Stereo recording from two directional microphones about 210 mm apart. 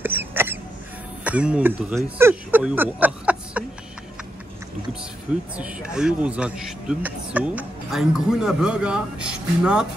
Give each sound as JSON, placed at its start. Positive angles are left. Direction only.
{"t": 0.0, "sound": "rodents", "side_deg": -10}
{"t": 1.2, "sound": "speech", "side_deg": -5}
{"t": 5.6, "sound": "a man's voice", "side_deg": -5}